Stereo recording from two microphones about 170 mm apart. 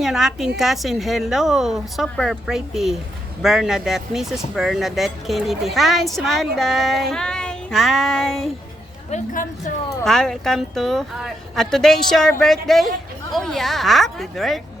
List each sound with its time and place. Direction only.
0.0 s speech: centre (ahead or behind)
9.0 s a woman's voice: 50° left (ahead or behind)
10.0 s speech: centre (ahead or behind)